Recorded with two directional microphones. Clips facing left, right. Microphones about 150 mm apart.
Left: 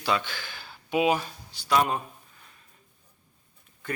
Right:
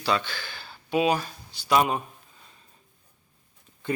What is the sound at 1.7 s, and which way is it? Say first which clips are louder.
Speech: right 2 dB; 15° right (ahead or behind).